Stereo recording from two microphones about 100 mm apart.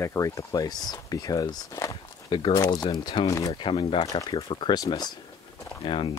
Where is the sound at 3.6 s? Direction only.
55° left (ahead or behind).